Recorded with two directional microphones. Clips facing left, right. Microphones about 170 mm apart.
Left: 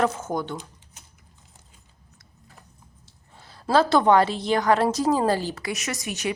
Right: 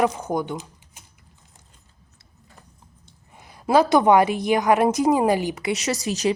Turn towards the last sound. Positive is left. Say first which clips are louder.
# right 6 dB
turn(degrees=-35)  # may be behind; listen again after turning